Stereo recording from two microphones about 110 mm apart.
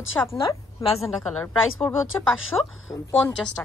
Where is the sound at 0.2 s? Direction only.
20° left (ahead or behind).